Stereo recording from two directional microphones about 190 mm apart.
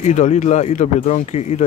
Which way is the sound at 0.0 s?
35° left (ahead or behind).